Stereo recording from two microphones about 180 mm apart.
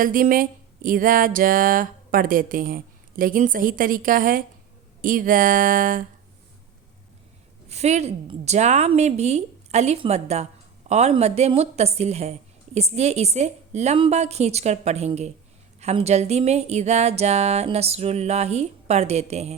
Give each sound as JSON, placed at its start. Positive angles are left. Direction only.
{"t": 0.0, "sound": "music", "side_deg": -50}
{"t": 7.7, "sound": "a woman's voice", "side_deg": -35}